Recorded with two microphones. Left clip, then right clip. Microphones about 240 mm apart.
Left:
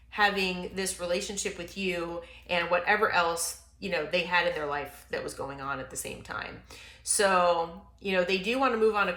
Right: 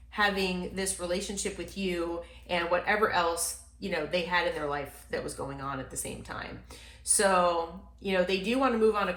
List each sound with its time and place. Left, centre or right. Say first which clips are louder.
0.1 s speech: left 2 dB; left